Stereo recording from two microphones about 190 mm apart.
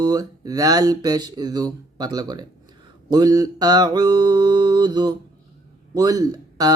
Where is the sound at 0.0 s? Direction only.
20° right (ahead or behind).